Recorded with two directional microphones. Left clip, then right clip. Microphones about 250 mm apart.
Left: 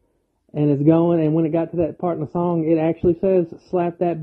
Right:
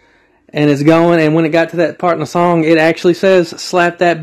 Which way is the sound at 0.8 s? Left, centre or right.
Right.